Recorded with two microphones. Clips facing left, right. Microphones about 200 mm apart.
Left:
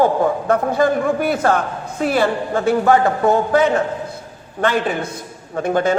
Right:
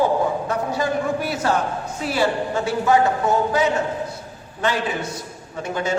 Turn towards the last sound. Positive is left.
turn(degrees=55)  # may be behind; listen again after turning